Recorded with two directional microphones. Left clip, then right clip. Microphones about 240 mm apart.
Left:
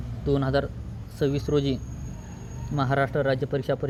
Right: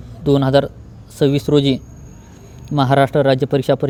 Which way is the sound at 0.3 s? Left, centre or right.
Right.